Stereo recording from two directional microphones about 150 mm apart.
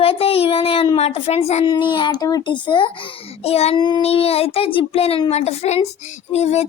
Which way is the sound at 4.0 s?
40° left (ahead or behind).